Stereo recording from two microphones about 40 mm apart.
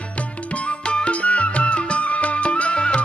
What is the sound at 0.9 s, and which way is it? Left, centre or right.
Music, left.